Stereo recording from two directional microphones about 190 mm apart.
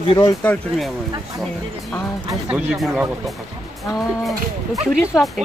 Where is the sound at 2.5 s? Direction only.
5° right (ahead or behind).